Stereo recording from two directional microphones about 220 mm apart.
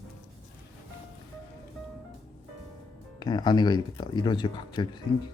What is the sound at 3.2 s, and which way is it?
Speech, 20° left (ahead or behind).